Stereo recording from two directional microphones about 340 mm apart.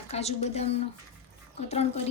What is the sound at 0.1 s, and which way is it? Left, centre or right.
Speech, centre.